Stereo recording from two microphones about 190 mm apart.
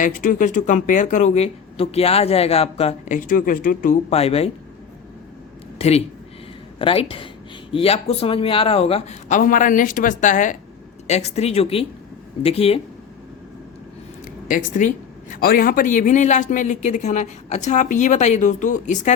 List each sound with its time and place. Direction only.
0.0 s speech: 45° left (ahead or behind)
3.2 s speech: 45° left (ahead or behind)
6.7 s speech: 30° left (ahead or behind)
14.4 s speech: 45° left (ahead or behind)